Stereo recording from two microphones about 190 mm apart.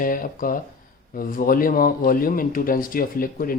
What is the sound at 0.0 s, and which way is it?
Speech, 45° left (ahead or behind).